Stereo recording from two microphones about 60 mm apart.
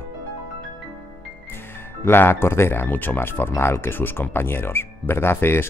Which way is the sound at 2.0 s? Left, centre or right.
Left.